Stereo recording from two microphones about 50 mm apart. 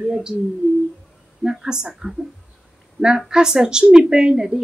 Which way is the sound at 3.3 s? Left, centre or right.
Centre.